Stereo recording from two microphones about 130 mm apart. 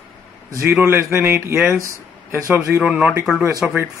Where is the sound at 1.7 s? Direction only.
25° right (ahead or behind).